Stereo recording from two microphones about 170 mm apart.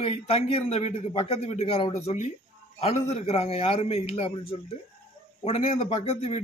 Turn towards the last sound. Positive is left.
turn(degrees=35)  # may be behind; listen again after turning